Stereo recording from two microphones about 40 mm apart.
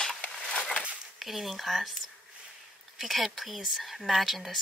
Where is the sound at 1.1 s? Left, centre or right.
Centre.